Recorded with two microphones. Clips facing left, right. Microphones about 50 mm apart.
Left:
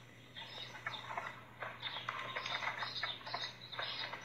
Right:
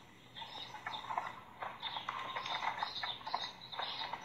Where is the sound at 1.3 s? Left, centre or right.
Left.